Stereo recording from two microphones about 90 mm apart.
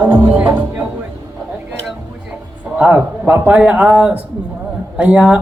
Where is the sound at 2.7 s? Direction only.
15° right (ahead or behind).